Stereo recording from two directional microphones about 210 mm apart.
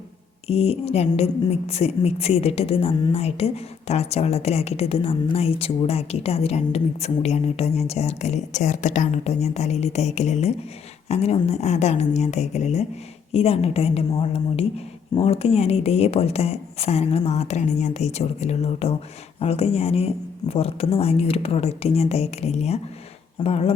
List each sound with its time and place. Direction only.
0.4 s a woman's voice: 30° left (ahead or behind)